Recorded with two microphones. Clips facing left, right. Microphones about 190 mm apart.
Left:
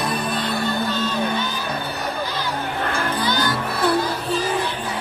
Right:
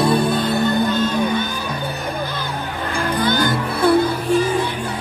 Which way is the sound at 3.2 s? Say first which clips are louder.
Right 5 dB; 55° right (ahead or behind).